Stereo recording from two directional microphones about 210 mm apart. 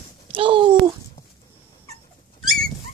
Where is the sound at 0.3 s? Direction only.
25° right (ahead or behind).